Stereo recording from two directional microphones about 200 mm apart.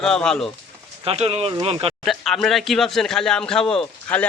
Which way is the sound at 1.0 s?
30° right (ahead or behind).